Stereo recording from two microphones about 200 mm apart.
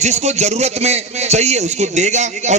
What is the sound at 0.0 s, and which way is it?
A man's voice, 35° right (ahead or behind).